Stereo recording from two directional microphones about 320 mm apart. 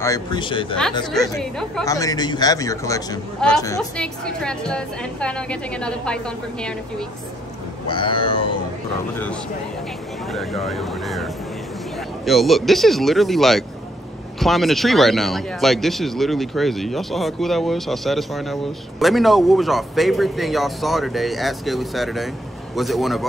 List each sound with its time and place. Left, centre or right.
0.0 s a man's voice: centre
1.1 s speech: centre
7.9 s a man's voice: centre
10.3 s speech: centre
12.3 s speech: centre